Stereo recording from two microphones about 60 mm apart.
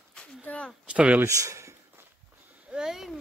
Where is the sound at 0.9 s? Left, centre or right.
Right.